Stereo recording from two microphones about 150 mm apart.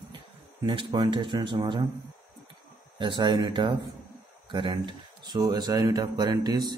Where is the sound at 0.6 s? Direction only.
30° right (ahead or behind).